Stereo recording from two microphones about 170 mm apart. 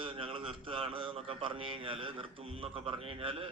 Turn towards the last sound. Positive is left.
turn(degrees=-30)  # may be behind; listen again after turning